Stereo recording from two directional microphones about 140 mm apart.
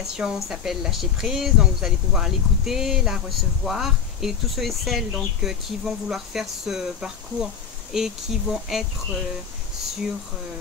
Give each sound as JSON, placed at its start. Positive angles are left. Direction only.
{"t": 0.2, "sound": "speech", "side_deg": -5}